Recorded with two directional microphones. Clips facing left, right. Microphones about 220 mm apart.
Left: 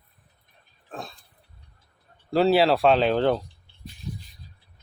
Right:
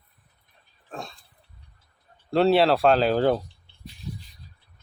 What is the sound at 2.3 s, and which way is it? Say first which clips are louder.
Speech: even; centre (ahead or behind).